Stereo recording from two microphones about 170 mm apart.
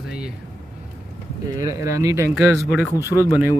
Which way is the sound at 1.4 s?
20° right (ahead or behind).